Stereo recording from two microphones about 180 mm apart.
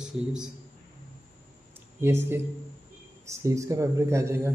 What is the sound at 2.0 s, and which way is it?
Speech, 15° right (ahead or behind).